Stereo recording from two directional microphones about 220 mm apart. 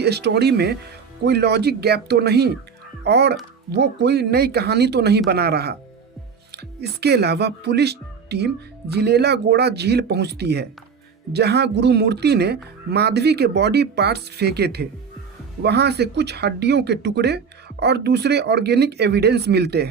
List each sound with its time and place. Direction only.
0.0 s speech: 50° right (ahead or behind)